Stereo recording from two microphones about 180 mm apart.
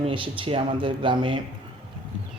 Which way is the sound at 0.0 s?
30° right (ahead or behind).